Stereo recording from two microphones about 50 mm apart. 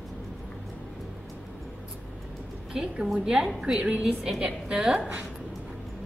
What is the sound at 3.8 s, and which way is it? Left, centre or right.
Speech, right.